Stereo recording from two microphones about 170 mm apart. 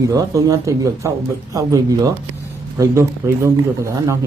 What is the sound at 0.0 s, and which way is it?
Speech, 20° right (ahead or behind).